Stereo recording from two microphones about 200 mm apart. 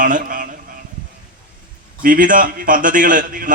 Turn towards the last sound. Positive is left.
turn(degrees=-40)  # may be behind; listen again after turning